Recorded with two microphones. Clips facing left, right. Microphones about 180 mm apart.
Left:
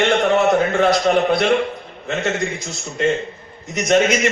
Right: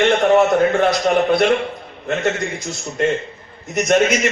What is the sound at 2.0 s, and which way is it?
A man's voice, 55° right (ahead or behind).